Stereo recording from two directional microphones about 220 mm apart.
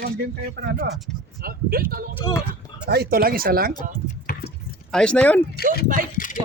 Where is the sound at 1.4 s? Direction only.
45° right (ahead or behind).